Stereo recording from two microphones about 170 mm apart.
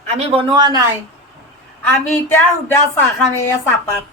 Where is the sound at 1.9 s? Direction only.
10° left (ahead or behind).